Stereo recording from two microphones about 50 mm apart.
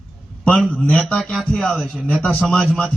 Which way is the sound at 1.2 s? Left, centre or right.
Centre.